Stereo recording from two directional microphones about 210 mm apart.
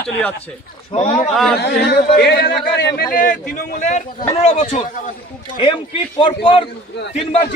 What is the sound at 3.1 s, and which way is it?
A man's voice, 40° left (ahead or behind).